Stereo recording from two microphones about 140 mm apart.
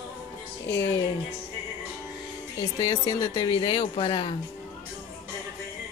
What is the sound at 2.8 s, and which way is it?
Speech, 25° left (ahead or behind).